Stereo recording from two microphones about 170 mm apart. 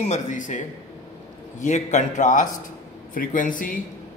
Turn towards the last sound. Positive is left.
turn(degrees=50)  # may be behind; listen again after turning